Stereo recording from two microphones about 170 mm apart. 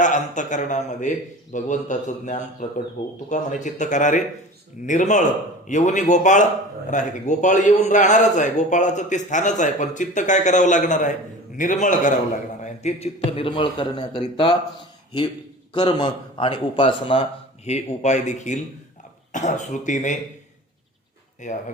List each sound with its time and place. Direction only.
0.0 s a man's voice: 45° left (ahead or behind); by 14.5 s 30° left (ahead or behind)
15.7 s speech: 25° left (ahead or behind)
17.7 s a man's voice: 40° left (ahead or behind)
21.4 s a man's voice: 45° left (ahead or behind)